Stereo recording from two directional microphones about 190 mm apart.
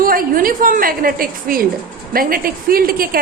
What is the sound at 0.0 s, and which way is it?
A woman's voice, 50° right (ahead or behind).